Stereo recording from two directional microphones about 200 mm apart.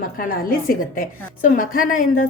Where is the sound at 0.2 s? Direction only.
45° left (ahead or behind).